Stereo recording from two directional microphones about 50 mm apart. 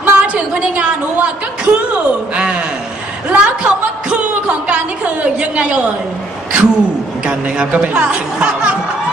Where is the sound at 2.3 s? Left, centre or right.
Right.